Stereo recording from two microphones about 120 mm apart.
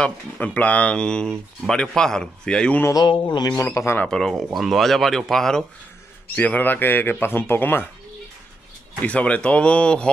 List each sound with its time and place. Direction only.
0.0 s speech: 10° left (ahead or behind)
3.1 s speech: 40° left (ahead or behind)
3.6 s speech: 20° left (ahead or behind)
4.1 s speech: centre (ahead or behind)
6.3 s speech: 15° left (ahead or behind)
9.0 s speech: 10° left (ahead or behind)